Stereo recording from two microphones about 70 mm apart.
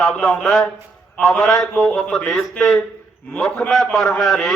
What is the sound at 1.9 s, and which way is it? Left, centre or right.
A man's voice, centre.